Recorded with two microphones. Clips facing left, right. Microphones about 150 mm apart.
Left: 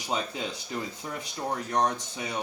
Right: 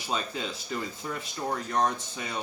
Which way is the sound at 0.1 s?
20° left (ahead or behind).